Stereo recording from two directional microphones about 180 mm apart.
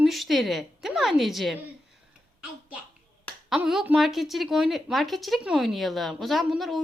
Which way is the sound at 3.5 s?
Centre (ahead or behind).